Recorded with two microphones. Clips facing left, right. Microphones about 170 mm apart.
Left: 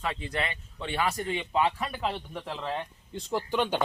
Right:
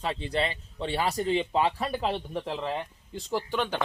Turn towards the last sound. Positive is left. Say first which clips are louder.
# left 2 dB
turn(degrees=5)  # may be behind; listen again after turning